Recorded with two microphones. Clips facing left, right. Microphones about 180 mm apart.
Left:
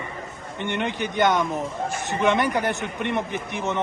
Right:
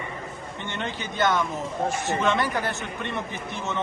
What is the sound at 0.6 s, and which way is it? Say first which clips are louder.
A man's voice: left 7 dB; 15° left (ahead or behind).